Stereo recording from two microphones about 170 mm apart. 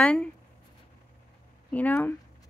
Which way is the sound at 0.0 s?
5° left (ahead or behind).